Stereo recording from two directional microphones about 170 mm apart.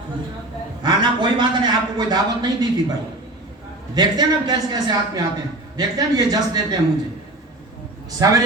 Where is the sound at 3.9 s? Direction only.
25° right (ahead or behind).